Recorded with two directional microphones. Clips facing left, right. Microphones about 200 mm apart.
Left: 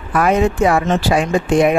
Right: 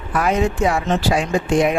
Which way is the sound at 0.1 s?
55° left (ahead or behind).